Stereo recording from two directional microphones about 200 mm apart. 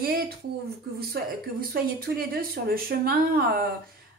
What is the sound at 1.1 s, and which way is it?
Speech, 45° right (ahead or behind).